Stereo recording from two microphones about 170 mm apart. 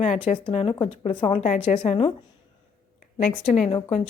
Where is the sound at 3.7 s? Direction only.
40° left (ahead or behind).